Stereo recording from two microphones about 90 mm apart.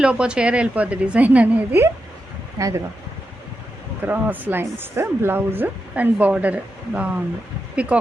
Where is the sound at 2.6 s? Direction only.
35° right (ahead or behind).